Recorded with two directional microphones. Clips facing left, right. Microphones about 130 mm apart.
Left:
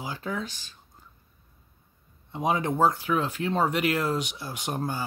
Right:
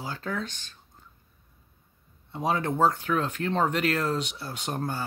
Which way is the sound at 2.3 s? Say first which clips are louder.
Left 1 dB; 15° left (ahead or behind).